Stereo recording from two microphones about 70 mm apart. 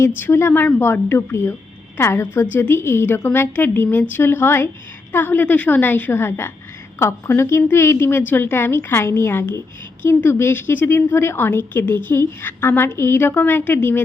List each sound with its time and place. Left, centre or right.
0.2 s a woman's voice: left